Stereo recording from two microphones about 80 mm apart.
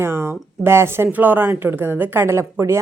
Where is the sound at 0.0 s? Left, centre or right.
Right.